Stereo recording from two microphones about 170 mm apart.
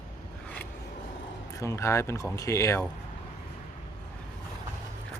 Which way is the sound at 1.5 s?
15° left (ahead or behind).